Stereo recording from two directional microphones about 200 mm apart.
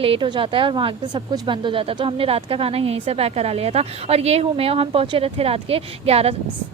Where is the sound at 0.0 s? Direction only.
25° right (ahead or behind).